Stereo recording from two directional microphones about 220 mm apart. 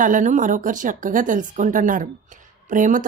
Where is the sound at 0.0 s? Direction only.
35° right (ahead or behind).